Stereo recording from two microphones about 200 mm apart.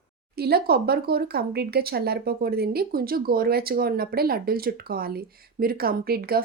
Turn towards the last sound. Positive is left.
turn(degrees=-50)  # may be behind; listen again after turning